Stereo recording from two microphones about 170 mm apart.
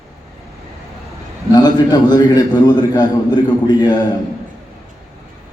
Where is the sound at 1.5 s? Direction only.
25° left (ahead or behind).